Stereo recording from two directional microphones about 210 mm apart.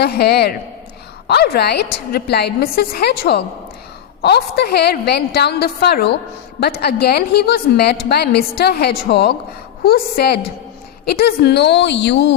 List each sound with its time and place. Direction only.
0.0 s a woman's voice: 50° left (ahead or behind)